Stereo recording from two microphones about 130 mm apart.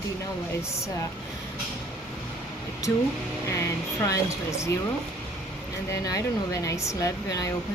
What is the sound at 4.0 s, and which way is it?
Speech, 25° left (ahead or behind).